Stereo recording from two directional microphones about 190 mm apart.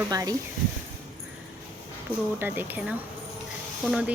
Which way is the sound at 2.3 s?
10° right (ahead or behind).